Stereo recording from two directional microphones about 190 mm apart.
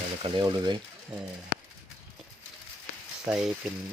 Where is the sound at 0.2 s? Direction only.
25° right (ahead or behind).